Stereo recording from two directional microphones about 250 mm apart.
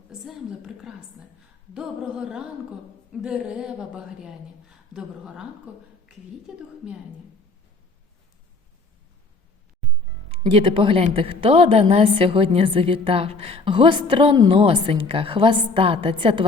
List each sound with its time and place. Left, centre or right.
0.1 s a sound: centre
1.7 s a woman's voice: centre
10.4 s a woman's voice: right